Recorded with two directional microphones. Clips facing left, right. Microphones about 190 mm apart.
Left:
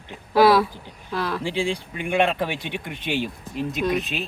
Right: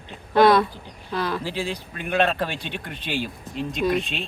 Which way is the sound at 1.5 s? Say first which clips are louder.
Left 4 dB; 15° left (ahead or behind).